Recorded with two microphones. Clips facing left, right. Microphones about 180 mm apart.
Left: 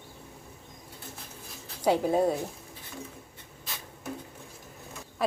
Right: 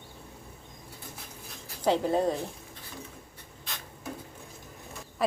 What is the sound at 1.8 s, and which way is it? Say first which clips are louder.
Speech: left 1 dB; 10° left (ahead or behind).